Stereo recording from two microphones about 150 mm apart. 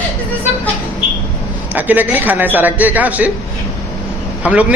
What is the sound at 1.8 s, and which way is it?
A man's voice, 10° right (ahead or behind).